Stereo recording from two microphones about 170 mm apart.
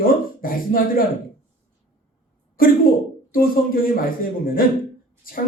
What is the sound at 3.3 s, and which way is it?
A man's voice, 55° left (ahead or behind).